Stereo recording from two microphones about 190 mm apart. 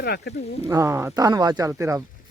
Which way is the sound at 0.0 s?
60° left (ahead or behind).